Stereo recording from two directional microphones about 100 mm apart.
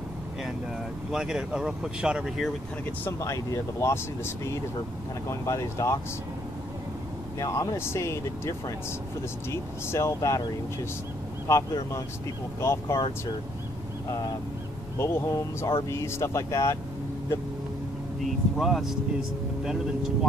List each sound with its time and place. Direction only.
1.1 s speech: 5° right (ahead or behind)
2.8 s speech: 20° left (ahead or behind)
3.2 s speech: 30° left (ahead or behind)
7.3 s speech: 30° left (ahead or behind)
11.5 s speech: 30° left (ahead or behind)
15.0 s speech: 30° left (ahead or behind)
18.2 s speech: centre (ahead or behind)